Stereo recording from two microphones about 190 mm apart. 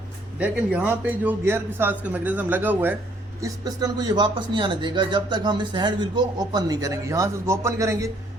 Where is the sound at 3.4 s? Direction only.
20° right (ahead or behind).